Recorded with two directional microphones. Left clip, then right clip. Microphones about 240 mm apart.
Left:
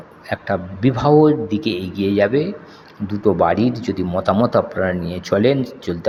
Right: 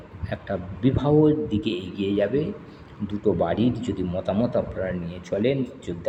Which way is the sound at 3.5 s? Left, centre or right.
Left.